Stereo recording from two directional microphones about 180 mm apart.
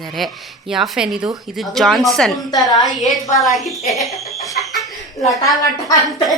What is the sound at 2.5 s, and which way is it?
Speech, 20° left (ahead or behind).